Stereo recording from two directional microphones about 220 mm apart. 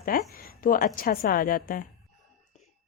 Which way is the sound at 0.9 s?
40° left (ahead or behind).